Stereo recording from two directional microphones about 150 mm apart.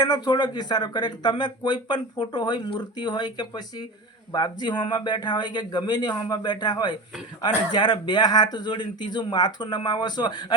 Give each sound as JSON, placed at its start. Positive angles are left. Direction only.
{"t": 0.0, "sound": "speech", "side_deg": 30}